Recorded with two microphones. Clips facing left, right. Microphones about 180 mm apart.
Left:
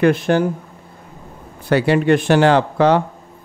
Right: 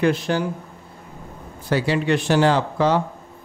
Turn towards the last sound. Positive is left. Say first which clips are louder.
# left 5 dB
turn(degrees=65)  # may be behind; listen again after turning